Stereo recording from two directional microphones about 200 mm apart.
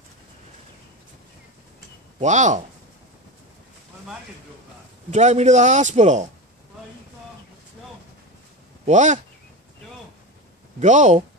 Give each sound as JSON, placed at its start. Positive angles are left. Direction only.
{"t": 2.1, "sound": "a man's voice", "side_deg": -35}
{"t": 5.1, "sound": "a man's voice", "side_deg": -35}
{"t": 8.8, "sound": "a man's voice", "side_deg": -35}
{"t": 10.8, "sound": "a man's voice", "side_deg": -35}